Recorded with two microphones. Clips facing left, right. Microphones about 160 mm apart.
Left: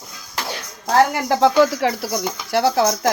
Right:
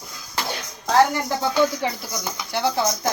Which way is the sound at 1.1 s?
90° left.